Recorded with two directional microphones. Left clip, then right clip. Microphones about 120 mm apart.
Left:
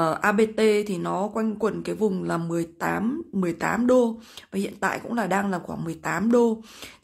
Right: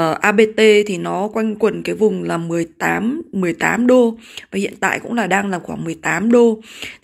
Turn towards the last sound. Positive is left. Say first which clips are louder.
# right 10 dB
turn(degrees=-15)  # may be behind; listen again after turning